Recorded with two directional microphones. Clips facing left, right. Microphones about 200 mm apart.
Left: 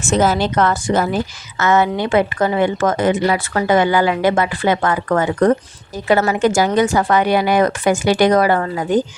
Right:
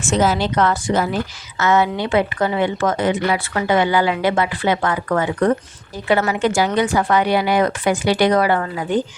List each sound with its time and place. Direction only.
0.1 s a woman's voice: 50° left (ahead or behind)